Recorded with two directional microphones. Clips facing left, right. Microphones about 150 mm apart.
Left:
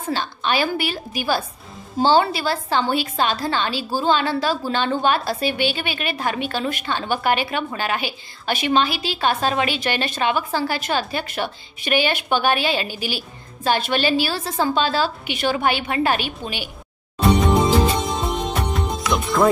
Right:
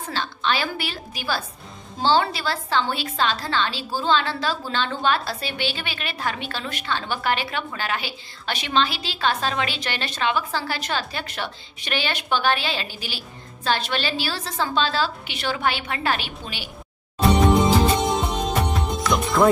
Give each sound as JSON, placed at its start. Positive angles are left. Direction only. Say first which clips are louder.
{"t": 0.1, "sound": "a woman's voice", "louder": "left 3 dB", "side_deg": 15}
{"t": 18.7, "sound": "music", "louder": "even", "side_deg": 0}